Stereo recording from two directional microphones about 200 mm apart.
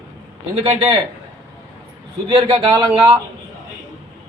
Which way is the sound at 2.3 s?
25° right (ahead or behind).